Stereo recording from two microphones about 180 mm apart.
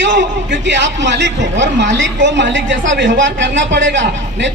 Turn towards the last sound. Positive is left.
turn(degrees=-80)